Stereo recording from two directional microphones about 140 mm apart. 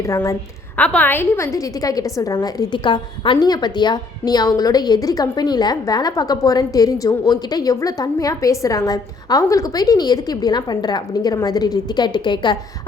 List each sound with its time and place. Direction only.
0.0 s a woman's voice: 20° left (ahead or behind)
0.8 s a woman's voice: 10° left (ahead or behind); by 12.9 s 35° left (ahead or behind)